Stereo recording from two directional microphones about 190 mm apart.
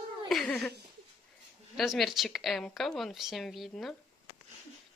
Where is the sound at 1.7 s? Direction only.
Centre (ahead or behind).